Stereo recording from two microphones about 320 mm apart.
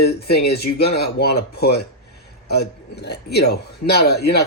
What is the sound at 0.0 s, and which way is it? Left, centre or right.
Speech, left.